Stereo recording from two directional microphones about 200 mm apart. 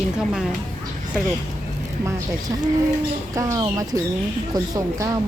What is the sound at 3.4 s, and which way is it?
Speech, 15° right (ahead or behind).